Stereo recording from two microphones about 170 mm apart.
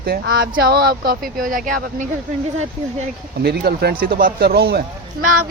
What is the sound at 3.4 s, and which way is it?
Speech, 70° right (ahead or behind).